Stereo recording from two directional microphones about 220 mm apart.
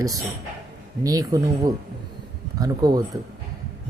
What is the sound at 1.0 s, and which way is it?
Speech, 15° right (ahead or behind).